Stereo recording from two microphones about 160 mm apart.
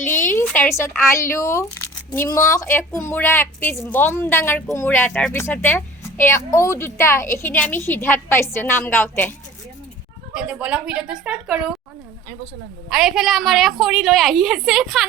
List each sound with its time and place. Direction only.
0.2 s speech: 10° left (ahead or behind)
10.3 s a woman's voice: 5° right (ahead or behind)
12.9 s a woman's voice: 5° right (ahead or behind)